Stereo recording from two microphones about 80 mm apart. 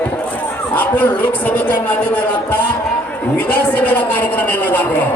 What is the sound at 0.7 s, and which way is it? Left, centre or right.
A man's voice, left.